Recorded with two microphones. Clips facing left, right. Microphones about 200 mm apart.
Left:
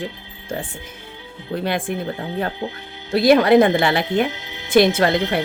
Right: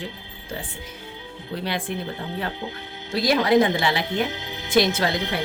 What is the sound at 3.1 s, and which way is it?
Speech, 60° left (ahead or behind).